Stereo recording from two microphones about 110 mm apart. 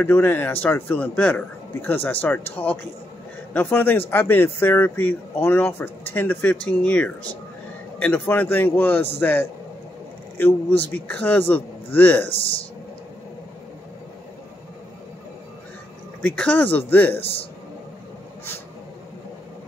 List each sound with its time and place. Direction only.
0.0 s a man's voice: 15° left (ahead or behind)
16.2 s speech: 10° left (ahead or behind)